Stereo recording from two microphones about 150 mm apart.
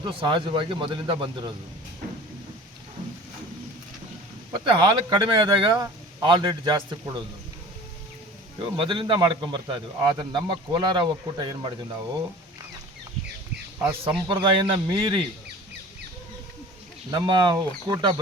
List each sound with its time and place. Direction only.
0.0 s a man's voice: 35° right (ahead or behind)
4.6 s a man's voice: 30° right (ahead or behind)
8.5 s a man's voice: 30° right (ahead or behind)
14.0 s a man's voice: 35° right (ahead or behind)
17.1 s a man's voice: 30° right (ahead or behind)